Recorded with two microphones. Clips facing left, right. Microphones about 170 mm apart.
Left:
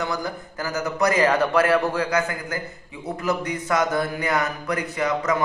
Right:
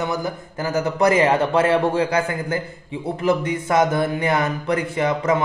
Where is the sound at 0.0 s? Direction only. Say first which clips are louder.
Right 3 dB; 20° right (ahead or behind).